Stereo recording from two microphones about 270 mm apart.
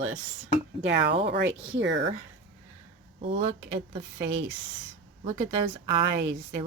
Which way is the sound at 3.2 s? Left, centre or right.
Right.